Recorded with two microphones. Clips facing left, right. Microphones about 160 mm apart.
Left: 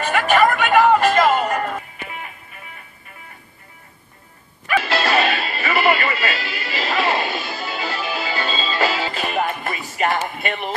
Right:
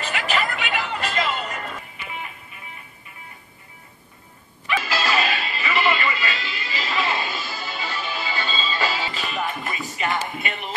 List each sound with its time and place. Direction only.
0.0 s music: 55° left (ahead or behind)
4.6 s music: 60° left (ahead or behind)
5.4 s music: 40° left (ahead or behind)